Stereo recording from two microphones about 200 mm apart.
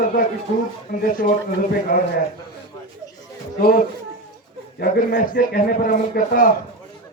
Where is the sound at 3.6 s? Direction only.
45° left (ahead or behind).